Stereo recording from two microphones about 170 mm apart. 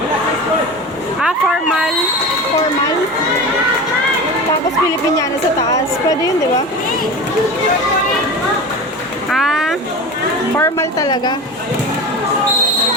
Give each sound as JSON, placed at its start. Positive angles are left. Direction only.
{"t": 9.3, "sound": "vehicle", "side_deg": 0}
{"t": 10.6, "sound": "a woman's voice", "side_deg": 20}